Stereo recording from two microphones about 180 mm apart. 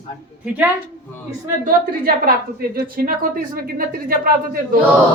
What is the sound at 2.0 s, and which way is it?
A woman's voice, 55° right (ahead or behind).